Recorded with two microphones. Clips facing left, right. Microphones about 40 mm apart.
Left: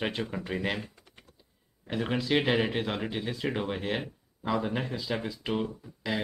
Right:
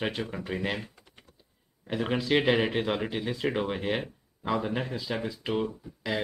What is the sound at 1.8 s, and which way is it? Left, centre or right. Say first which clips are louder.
Speech: right 1 dB; centre.